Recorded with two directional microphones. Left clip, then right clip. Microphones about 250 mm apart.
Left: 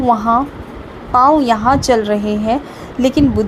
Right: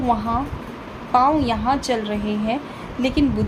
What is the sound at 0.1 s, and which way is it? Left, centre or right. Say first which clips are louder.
A woman's voice: left 9 dB; left.